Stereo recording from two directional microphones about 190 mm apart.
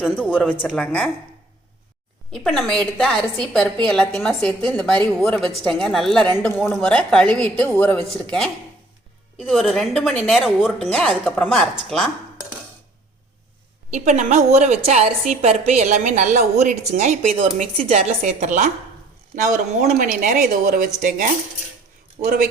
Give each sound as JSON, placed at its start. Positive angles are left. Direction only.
{"t": 0.2, "sound": "speech", "side_deg": 10}
{"t": 2.3, "sound": "a woman's voice", "side_deg": 0}
{"t": 13.9, "sound": "a woman's voice", "side_deg": -40}